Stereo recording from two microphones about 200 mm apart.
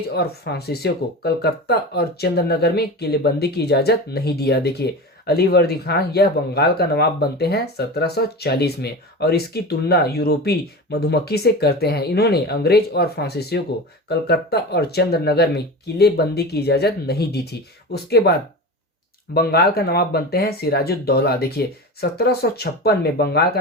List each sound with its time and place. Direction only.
0.1 s speech: 55° left (ahead or behind)